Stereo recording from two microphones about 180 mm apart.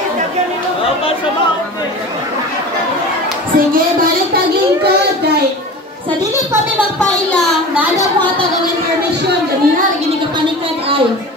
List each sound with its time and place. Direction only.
3.5 s speech: 50° right (ahead or behind)
8.0 s a woman's voice: 10° left (ahead or behind)